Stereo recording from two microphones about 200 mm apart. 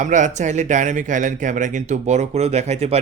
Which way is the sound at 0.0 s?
40° right (ahead or behind).